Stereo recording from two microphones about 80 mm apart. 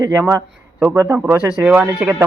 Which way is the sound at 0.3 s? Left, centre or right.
Right.